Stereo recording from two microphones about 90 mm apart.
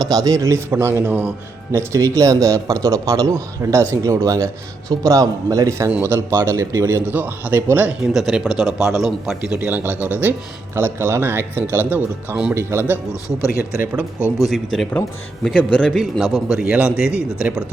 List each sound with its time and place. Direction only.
0.1 s a man's voice: 45° right (ahead or behind); by 1.3 s 20° right (ahead or behind)
1.7 s speech: 35° right (ahead or behind)
7.1 s a man's voice: 20° right (ahead or behind)
11.6 s speech: 25° left (ahead or behind)
11.9 s a man's voice: 20° right (ahead or behind)
12.5 s a man's voice: 30° right (ahead or behind)
14.4 s a man's voice: centre (ahead or behind)
16.0 s a man's voice: 5° right (ahead or behind)